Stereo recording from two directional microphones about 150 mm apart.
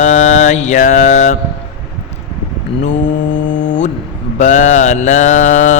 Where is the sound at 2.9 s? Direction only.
55° left (ahead or behind).